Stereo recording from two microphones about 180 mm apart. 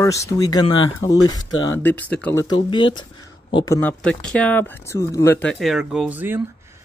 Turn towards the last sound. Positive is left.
turn(degrees=-10)  # may be behind; listen again after turning